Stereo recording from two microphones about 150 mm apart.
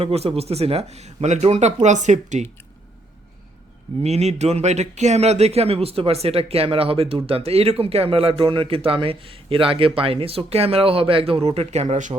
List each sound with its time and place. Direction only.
0.0 s speech: 40° right (ahead or behind)
4.0 s a man's voice: 45° right (ahead or behind)